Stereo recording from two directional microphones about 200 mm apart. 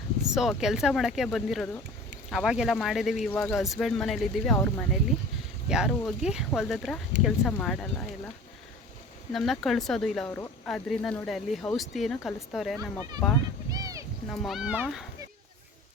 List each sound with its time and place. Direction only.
0.2 s speech: centre (ahead or behind)
5.6 s speech: 5° right (ahead or behind)
9.3 s speech: centre (ahead or behind)
13.7 s a sound: 20° right (ahead or behind)
14.3 s speech: centre (ahead or behind)